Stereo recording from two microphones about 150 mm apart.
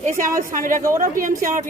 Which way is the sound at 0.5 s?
65° right (ahead or behind).